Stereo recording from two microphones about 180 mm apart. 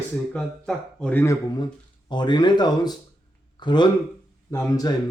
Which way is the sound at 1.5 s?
25° left (ahead or behind).